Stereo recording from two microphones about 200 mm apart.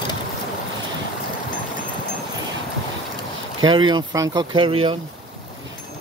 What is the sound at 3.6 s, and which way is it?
Speech, 25° right (ahead or behind).